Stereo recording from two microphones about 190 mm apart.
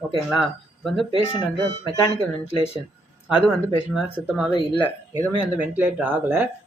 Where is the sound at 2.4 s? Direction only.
30° left (ahead or behind).